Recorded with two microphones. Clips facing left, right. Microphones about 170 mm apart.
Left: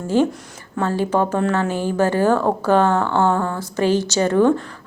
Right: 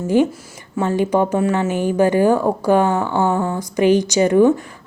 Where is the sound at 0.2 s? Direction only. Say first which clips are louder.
Left 1 dB; 15° right (ahead or behind).